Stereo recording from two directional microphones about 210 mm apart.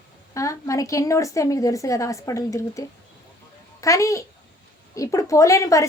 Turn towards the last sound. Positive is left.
turn(degrees=15)  # may be behind; listen again after turning